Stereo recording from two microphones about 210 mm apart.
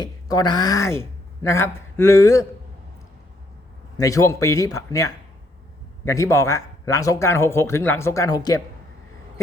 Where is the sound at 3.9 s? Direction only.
15° left (ahead or behind).